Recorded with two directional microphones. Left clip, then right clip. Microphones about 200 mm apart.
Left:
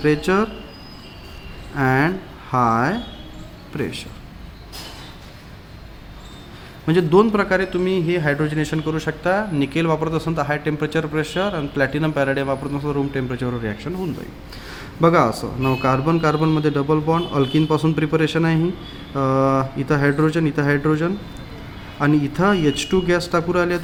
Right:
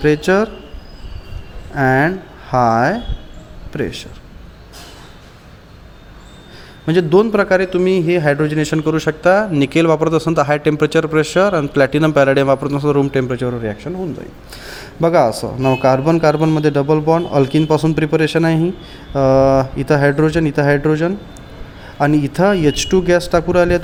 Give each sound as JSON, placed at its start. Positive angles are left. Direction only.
{"t": 0.0, "sound": "speech", "side_deg": -20}
{"t": 1.7, "sound": "speech", "side_deg": -20}
{"t": 6.8, "sound": "a man's voice", "side_deg": -20}